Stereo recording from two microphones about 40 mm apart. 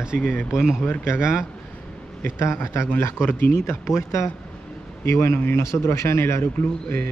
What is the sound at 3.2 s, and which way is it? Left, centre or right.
Speech, left.